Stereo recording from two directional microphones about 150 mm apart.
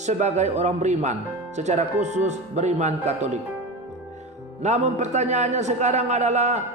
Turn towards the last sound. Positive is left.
turn(degrees=-50)  # may be behind; listen again after turning